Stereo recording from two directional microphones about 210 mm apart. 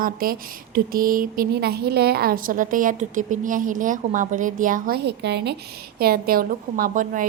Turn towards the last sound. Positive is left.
turn(degrees=-40)  # may be behind; listen again after turning